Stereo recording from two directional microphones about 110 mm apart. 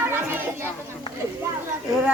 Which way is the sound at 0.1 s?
20° right (ahead or behind).